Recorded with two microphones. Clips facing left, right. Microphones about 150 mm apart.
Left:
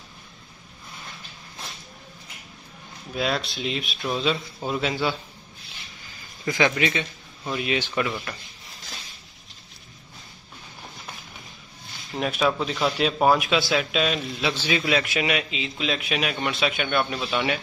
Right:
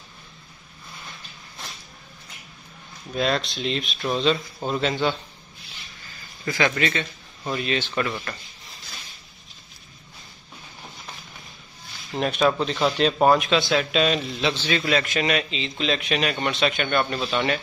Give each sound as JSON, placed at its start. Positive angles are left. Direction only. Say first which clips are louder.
{"t": 3.1, "sound": "speech", "louder": "right 2 dB", "side_deg": 5}
{"t": 6.4, "sound": "speech", "louder": "left 1 dB", "side_deg": 20}
{"t": 12.2, "sound": "speech", "louder": "right 2 dB", "side_deg": 5}